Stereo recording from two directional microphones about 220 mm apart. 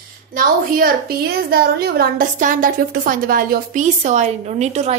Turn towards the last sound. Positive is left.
turn(degrees=-30)  # may be behind; listen again after turning